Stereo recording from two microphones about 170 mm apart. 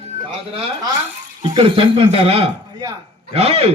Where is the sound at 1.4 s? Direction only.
30° right (ahead or behind).